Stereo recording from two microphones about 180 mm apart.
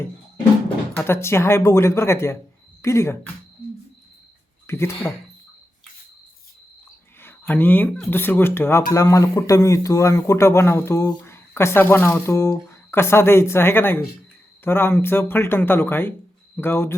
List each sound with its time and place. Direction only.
0.9 s speech: 15° left (ahead or behind)
4.6 s speech: 15° left (ahead or behind)
7.2 s speech: 10° left (ahead or behind)